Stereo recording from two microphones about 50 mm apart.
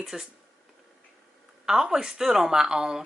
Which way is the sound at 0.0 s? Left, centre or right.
Centre.